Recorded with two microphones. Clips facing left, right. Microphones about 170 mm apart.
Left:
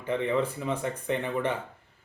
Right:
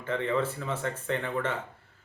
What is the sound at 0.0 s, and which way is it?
Speech, 15° left (ahead or behind).